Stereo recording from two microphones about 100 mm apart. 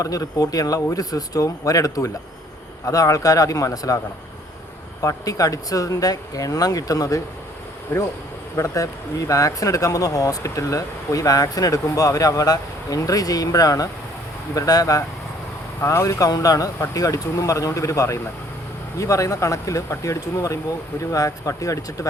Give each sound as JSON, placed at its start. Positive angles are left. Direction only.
{"t": 0.0, "sound": "speech", "side_deg": 35}
{"t": 5.0, "sound": "speech", "side_deg": 35}
{"t": 7.9, "sound": "speech", "side_deg": 25}